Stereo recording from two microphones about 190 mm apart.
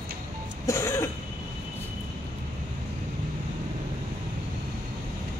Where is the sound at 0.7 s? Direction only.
15° left (ahead or behind).